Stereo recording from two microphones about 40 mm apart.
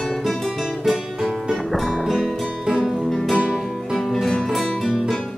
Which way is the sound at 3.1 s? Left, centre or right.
Centre.